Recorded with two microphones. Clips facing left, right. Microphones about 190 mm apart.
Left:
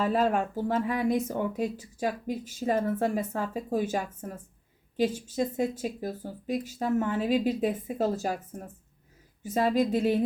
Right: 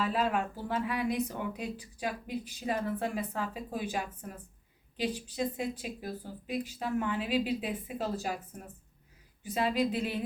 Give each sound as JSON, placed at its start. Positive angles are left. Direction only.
{"t": 0.0, "sound": "speech", "side_deg": 45}